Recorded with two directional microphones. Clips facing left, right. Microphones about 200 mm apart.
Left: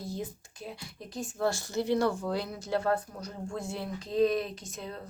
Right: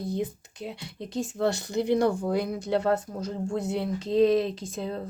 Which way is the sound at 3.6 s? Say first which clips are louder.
Right 8 dB; 65° right (ahead or behind).